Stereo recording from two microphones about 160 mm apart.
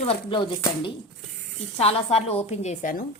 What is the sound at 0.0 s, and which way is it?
A woman's voice, 35° left (ahead or behind).